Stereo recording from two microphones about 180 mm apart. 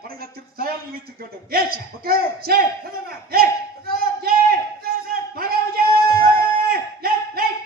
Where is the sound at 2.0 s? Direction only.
55° right (ahead or behind).